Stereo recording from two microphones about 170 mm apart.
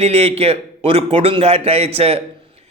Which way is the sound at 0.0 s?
35° right (ahead or behind).